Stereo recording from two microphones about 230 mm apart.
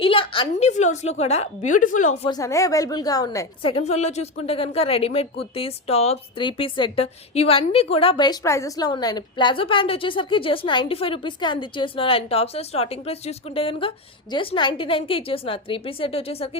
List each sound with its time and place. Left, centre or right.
0.0 s a woman's voice: left
2.3 s a woman's voice: centre